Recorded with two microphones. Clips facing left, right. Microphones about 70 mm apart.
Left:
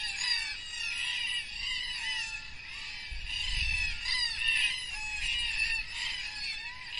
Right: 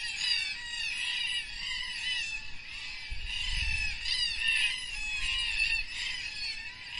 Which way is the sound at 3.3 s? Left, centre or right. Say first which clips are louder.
Even; centre.